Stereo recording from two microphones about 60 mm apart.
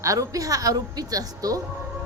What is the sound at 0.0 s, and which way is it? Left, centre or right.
A woman's voice, right.